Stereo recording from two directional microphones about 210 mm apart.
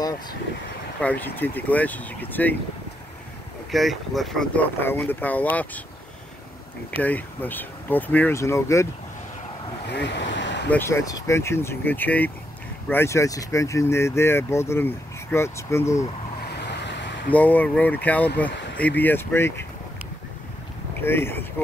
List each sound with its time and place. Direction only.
1.0 s speech: 10° left (ahead or behind)
3.7 s speech: centre (ahead or behind)
7.0 s speech: 10° left (ahead or behind)
9.8 s a sound: 55° left (ahead or behind)
10.7 s speech: 10° left (ahead or behind)
17.3 s speech: 10° left (ahead or behind)
21.0 s speech: 10° left (ahead or behind)